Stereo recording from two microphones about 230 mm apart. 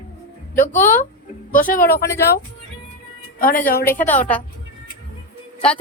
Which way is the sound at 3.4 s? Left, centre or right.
Left.